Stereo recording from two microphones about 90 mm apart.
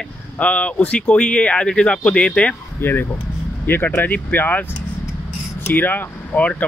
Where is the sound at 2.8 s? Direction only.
25° left (ahead or behind).